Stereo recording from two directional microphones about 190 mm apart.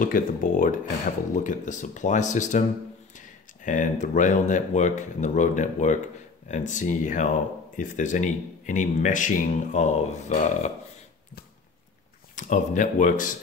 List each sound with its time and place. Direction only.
0.0 s speech: 45° left (ahead or behind)
3.6 s speech: 40° left (ahead or behind)
12.4 s speech: 40° left (ahead or behind)